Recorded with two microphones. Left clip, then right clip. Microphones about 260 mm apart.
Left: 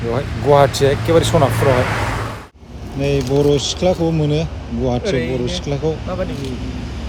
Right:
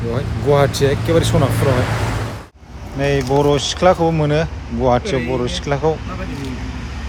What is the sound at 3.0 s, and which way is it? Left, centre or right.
Speech, right.